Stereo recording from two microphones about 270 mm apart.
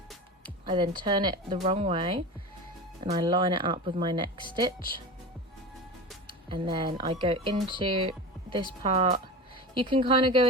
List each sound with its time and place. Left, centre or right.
0.4 s speech: centre
6.2 s speech: centre